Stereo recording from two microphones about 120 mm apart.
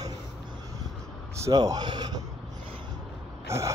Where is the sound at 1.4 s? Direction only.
30° right (ahead or behind).